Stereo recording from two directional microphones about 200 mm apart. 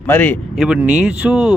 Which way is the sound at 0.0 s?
10° left (ahead or behind).